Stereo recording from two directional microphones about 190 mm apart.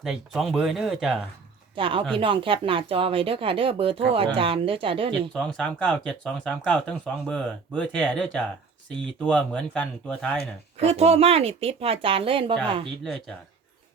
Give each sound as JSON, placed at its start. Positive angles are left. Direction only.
{"t": 0.0, "sound": "speech", "side_deg": 0}
{"t": 1.7, "sound": "speech", "side_deg": -25}
{"t": 5.3, "sound": "speech", "side_deg": 5}
{"t": 10.8, "sound": "speech", "side_deg": -35}